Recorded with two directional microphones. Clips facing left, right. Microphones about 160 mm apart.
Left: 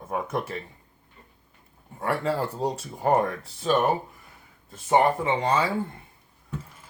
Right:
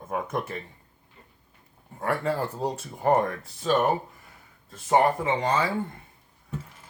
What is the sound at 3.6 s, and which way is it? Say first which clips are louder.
Speech: even; 15° left (ahead or behind).